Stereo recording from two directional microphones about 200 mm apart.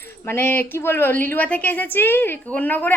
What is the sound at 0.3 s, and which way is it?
A woman's voice, 10° left (ahead or behind).